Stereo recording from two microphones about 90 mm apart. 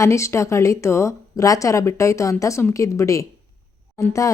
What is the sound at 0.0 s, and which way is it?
Speech, 30° left (ahead or behind).